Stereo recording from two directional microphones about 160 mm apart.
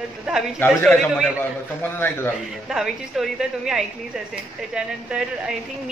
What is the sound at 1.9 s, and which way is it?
Speech, 15° left (ahead or behind).